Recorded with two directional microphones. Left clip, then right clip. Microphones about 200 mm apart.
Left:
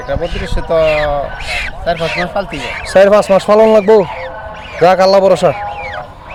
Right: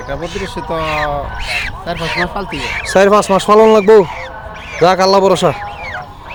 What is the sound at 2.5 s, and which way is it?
Speech, 10° right (ahead or behind).